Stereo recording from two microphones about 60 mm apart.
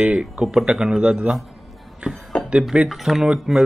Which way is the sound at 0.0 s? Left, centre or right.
Centre.